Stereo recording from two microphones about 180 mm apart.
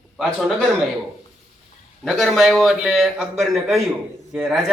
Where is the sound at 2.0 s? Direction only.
Centre (ahead or behind).